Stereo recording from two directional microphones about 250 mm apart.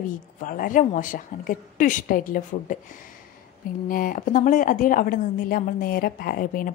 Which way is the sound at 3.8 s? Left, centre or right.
Left.